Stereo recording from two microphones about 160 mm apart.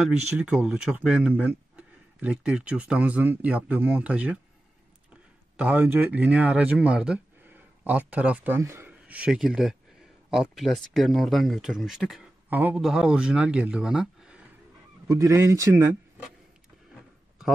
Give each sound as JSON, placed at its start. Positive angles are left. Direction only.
{"t": 0.4, "sound": "speech", "side_deg": -5}
{"t": 5.6, "sound": "speech", "side_deg": -10}
{"t": 15.0, "sound": "speech", "side_deg": -20}